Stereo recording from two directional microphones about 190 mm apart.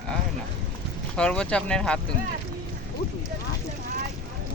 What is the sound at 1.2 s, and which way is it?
Speech, 5° left (ahead or behind).